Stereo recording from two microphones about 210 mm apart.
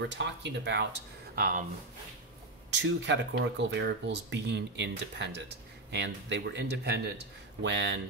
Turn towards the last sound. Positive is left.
turn(degrees=-60)  # may be behind; listen again after turning